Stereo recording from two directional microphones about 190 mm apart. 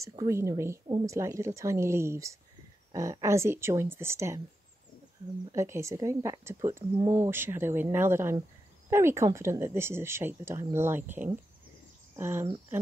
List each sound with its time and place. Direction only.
0.1 s speech: 15° right (ahead or behind)
5.5 s speech: 15° right (ahead or behind)